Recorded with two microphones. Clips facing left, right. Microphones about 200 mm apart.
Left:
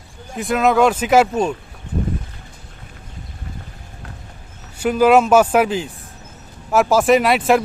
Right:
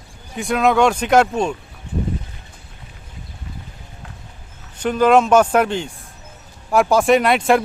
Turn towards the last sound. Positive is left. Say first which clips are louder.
# even
turn(degrees=0)  # may be behind; listen again after turning